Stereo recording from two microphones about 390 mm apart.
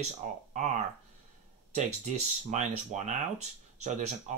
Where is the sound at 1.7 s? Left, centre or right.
Centre.